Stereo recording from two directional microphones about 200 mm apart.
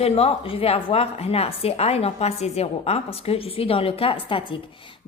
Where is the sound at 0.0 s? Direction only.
30° left (ahead or behind).